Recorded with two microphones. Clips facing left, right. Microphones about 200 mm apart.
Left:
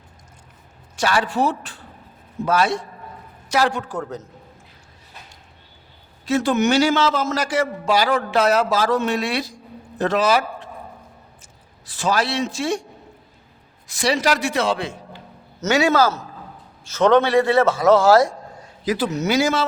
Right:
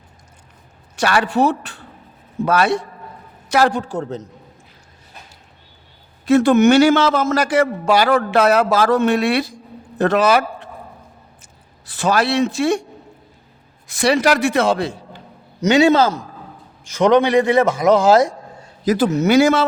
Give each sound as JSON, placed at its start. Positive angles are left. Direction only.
{"t": 0.9, "sound": "a man's voice", "side_deg": -65}
{"t": 3.7, "sound": "a man's voice", "side_deg": -30}
{"t": 6.2, "sound": "a man's voice", "side_deg": -55}
{"t": 11.9, "sound": "a man's voice", "side_deg": -65}
{"t": 13.8, "sound": "a man's voice", "side_deg": -60}
{"t": 15.6, "sound": "a man's voice", "side_deg": -20}
{"t": 18.9, "sound": "a man's voice", "side_deg": -50}